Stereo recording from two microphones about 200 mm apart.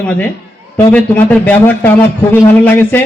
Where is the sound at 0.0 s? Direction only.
5° left (ahead or behind).